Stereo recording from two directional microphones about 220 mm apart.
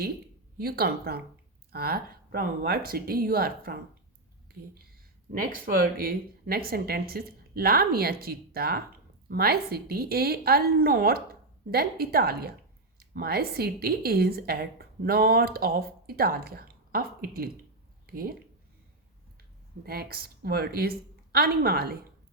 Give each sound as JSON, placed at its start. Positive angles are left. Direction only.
{"t": 0.6, "sound": "speech", "side_deg": -45}
{"t": 5.3, "sound": "speech", "side_deg": -40}
{"t": 18.0, "sound": "a sound", "side_deg": -40}
{"t": 19.8, "sound": "speech", "side_deg": -45}